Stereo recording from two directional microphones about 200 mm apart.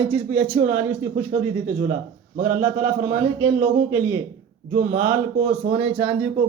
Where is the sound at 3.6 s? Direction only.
10° right (ahead or behind).